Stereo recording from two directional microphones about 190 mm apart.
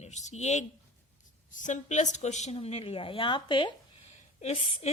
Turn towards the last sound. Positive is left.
turn(degrees=35)  # may be behind; listen again after turning